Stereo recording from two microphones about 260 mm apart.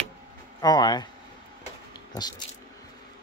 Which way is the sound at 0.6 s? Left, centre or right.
Centre.